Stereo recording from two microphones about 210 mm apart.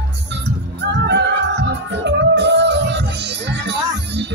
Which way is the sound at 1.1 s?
55° right (ahead or behind).